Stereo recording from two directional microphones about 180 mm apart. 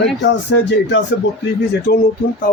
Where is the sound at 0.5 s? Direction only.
90° left.